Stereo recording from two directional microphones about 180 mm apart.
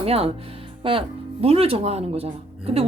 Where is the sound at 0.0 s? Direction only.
35° right (ahead or behind).